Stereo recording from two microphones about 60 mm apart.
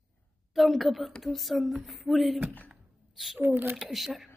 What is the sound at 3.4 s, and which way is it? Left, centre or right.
Speech, right.